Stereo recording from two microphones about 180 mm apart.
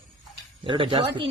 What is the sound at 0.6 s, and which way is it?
Speech, 30° right (ahead or behind).